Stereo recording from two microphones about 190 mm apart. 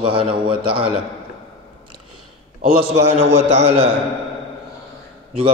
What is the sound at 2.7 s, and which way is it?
A man's voice, 30° right (ahead or behind).